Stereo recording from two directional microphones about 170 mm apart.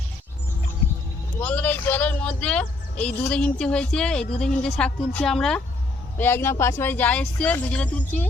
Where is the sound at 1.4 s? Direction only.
10° left (ahead or behind).